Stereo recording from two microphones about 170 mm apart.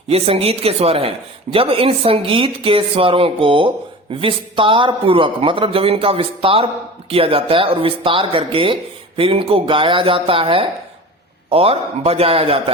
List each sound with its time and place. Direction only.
0.1 s speech: 35° right (ahead or behind)